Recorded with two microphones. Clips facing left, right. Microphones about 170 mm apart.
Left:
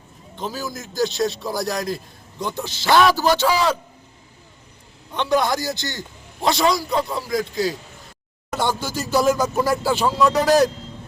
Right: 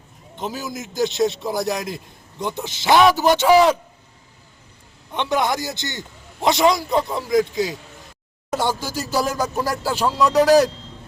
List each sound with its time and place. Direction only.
0.3 s a man's voice: 20° right (ahead or behind)
5.1 s a man's voice: 20° right (ahead or behind)
8.5 s a man's voice: 10° right (ahead or behind)